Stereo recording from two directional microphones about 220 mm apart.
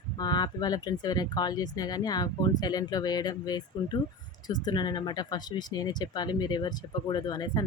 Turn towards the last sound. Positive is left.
turn(degrees=20)  # may be behind; listen again after turning